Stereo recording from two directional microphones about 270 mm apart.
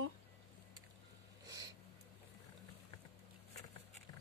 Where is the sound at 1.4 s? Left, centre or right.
Centre.